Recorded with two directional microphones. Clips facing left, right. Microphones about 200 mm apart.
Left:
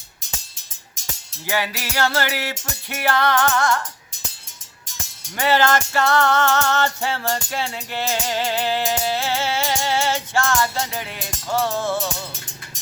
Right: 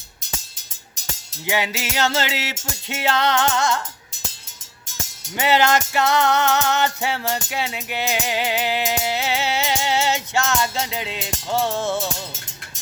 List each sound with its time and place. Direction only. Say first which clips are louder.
1.5 s music: right 1 dB; 20° right (ahead or behind)
5.4 s music: even; 20° right (ahead or behind)